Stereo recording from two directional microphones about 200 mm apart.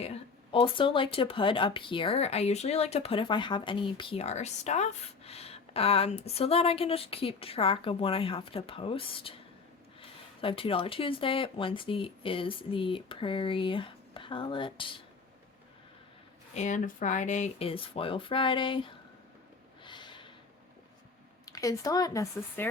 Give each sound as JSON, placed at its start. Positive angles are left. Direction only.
{"t": 0.0, "sound": "speech", "side_deg": 30}
{"t": 16.6, "sound": "speech", "side_deg": 40}
{"t": 19.8, "sound": "snort", "side_deg": 25}
{"t": 21.4, "sound": "speech", "side_deg": 15}